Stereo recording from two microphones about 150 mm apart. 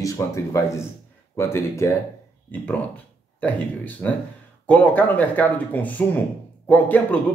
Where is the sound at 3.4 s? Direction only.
10° left (ahead or behind).